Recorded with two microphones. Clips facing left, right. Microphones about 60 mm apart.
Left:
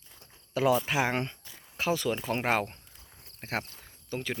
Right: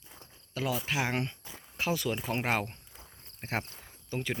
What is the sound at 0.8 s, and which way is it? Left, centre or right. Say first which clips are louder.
Speech: left 3 dB; centre.